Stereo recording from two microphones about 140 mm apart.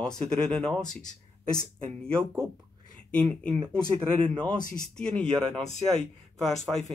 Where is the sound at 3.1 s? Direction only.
10° left (ahead or behind).